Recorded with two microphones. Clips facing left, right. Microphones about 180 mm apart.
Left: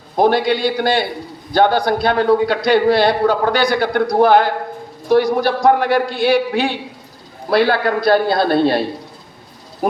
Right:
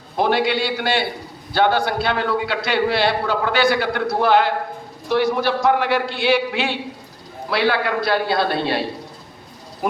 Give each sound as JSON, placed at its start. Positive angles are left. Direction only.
{"t": 0.2, "sound": "a man's voice", "side_deg": 45}